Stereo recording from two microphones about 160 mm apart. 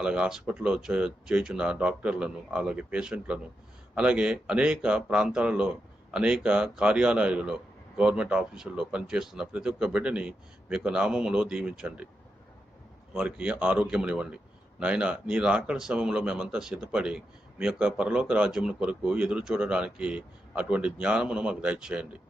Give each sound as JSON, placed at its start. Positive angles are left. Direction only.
{"t": 0.0, "sound": "speech", "side_deg": -5}
{"t": 13.1, "sound": "speech", "side_deg": -5}